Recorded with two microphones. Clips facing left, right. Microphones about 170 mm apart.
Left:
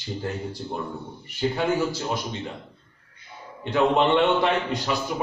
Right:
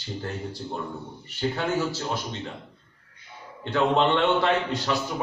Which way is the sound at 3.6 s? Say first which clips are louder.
Left 2 dB; 15° left (ahead or behind).